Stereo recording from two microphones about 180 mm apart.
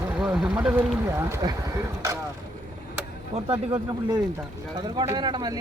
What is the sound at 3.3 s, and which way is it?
Speech, 35° right (ahead or behind).